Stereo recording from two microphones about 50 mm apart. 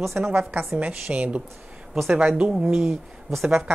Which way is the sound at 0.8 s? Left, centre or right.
Right.